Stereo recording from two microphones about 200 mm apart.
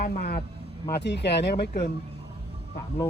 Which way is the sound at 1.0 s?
60° left (ahead or behind).